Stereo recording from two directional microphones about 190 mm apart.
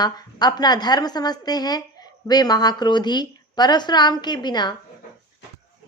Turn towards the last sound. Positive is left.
turn(degrees=20)  # may be behind; listen again after turning